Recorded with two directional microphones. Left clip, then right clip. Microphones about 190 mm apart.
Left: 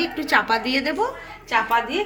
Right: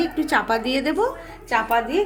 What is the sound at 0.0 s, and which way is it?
A woman's voice, 40° right (ahead or behind).